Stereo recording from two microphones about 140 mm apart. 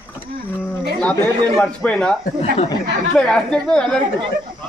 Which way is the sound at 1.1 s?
15° left (ahead or behind).